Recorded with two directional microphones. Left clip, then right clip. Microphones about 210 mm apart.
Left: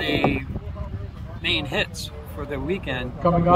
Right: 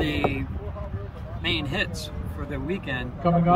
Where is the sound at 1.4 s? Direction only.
15° left (ahead or behind).